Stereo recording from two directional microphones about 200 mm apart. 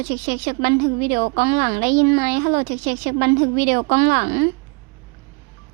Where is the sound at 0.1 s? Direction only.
45° right (ahead or behind).